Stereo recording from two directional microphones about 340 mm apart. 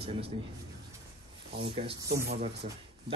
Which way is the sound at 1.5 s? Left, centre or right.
Centre.